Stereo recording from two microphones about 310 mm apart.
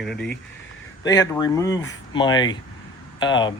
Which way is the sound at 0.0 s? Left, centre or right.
Centre.